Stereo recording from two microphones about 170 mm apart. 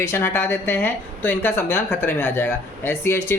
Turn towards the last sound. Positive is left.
turn(degrees=15)  # may be behind; listen again after turning